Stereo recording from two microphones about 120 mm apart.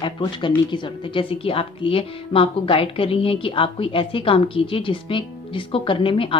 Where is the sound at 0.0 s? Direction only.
40° left (ahead or behind).